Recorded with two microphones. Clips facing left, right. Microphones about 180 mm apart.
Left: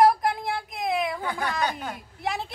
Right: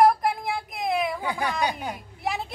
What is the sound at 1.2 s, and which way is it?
Speech, 10° right (ahead or behind).